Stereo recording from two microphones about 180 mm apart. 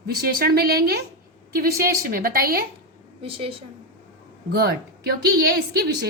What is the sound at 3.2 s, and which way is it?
Speech, 30° right (ahead or behind).